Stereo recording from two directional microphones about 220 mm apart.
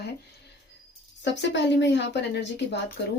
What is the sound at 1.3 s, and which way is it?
Speech, 55° left (ahead or behind).